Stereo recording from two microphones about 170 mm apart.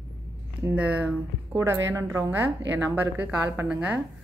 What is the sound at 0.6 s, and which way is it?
A woman's voice, 10° right (ahead or behind).